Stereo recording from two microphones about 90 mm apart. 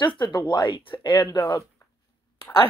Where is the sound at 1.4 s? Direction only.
40° left (ahead or behind).